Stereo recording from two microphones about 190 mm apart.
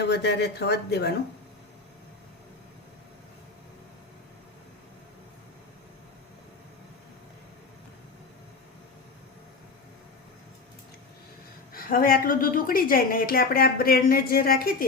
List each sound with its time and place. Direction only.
0.0 s speech: 60° left (ahead or behind)
11.7 s a woman's voice: 50° left (ahead or behind)